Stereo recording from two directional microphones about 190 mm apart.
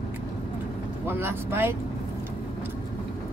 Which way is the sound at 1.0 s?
10° right (ahead or behind).